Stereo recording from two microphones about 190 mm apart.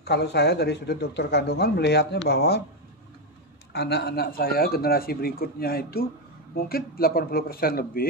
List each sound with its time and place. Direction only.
0.0 s speech: 60° left (ahead or behind)
3.7 s a man's voice: 60° left (ahead or behind)